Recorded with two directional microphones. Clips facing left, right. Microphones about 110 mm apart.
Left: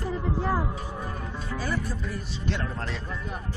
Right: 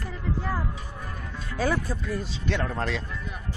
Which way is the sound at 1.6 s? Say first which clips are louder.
Right 6 dB; 90° right.